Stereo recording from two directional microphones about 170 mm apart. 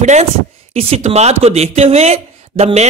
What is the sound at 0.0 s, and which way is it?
A woman's voice, 40° right (ahead or behind).